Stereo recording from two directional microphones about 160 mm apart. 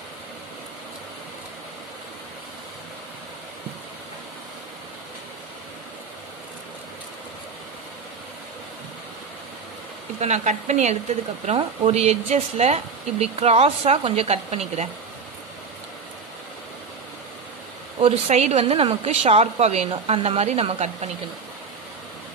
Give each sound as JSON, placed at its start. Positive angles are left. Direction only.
{"t": 10.2, "sound": "speech", "side_deg": -45}
{"t": 18.0, "sound": "speech", "side_deg": -40}